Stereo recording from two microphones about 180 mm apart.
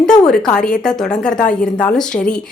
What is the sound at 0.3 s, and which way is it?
Speech, 5° left (ahead or behind).